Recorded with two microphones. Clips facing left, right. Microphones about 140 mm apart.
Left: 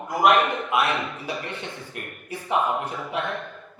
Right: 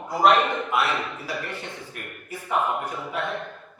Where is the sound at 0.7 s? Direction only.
20° left (ahead or behind).